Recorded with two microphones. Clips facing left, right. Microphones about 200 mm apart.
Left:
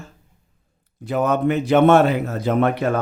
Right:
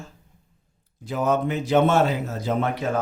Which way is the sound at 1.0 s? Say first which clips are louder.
Left 4 dB; 60° left (ahead or behind).